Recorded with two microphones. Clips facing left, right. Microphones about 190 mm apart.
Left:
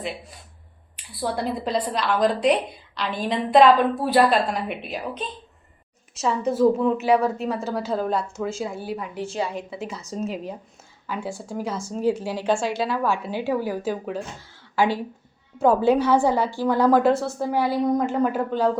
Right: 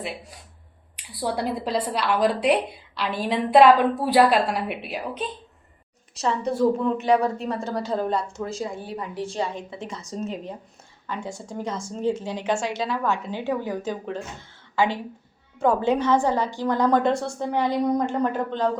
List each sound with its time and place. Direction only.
0.9 s a woman's voice: 10° right (ahead or behind)
6.5 s a woman's voice: 5° left (ahead or behind)
15.6 s a woman's voice: 10° left (ahead or behind)